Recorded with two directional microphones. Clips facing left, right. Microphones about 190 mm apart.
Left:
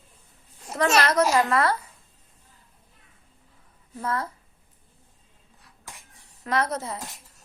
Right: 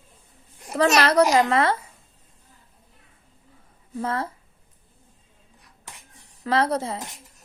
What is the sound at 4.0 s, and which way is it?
Speech, 30° right (ahead or behind).